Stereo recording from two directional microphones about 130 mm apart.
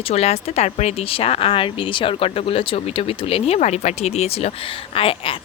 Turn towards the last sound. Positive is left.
turn(degrees=45)  # may be behind; listen again after turning